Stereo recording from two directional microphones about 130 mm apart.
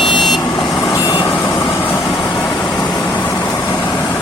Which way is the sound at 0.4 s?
35° left (ahead or behind).